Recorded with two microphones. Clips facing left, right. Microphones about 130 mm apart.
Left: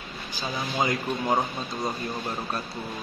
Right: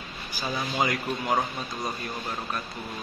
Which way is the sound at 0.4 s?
25° left (ahead or behind).